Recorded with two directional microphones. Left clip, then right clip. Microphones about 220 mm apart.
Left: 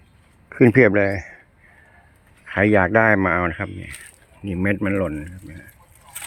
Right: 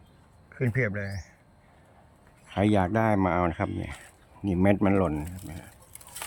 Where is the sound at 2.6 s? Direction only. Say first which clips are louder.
Left 9 dB; centre (ahead or behind).